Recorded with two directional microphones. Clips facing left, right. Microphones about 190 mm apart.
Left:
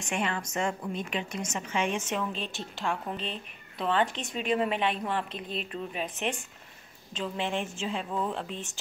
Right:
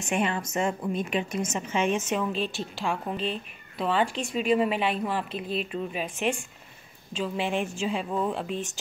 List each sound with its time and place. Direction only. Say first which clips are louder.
0.0 s a woman's voice: right 4 dB; 20° right (ahead or behind)